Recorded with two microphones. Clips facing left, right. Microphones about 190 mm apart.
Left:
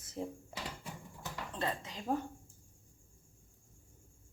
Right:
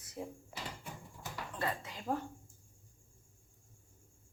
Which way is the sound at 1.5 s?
20° left (ahead or behind).